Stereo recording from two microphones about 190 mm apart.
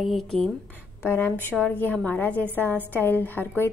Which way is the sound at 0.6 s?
10° left (ahead or behind).